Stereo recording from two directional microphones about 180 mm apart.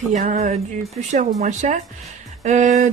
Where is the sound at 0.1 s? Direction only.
40° right (ahead or behind).